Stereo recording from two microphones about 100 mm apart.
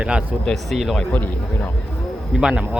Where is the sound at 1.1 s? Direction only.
15° left (ahead or behind).